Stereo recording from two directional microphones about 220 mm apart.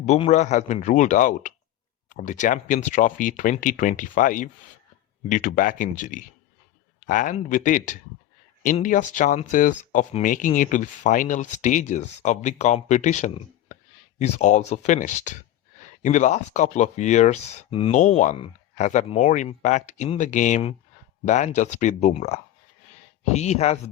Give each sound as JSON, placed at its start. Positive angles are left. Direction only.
{"t": 0.0, "sound": "speech", "side_deg": 30}